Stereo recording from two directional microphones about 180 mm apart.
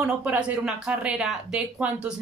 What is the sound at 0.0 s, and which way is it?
Speech, 5° right (ahead or behind).